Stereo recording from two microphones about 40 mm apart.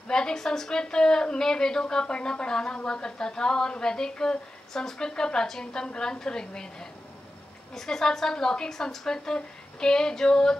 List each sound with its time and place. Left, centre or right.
0.1 s a woman's voice: centre